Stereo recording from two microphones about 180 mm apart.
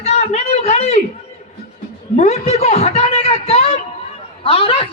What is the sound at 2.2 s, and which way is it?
A man's voice, 35° left (ahead or behind).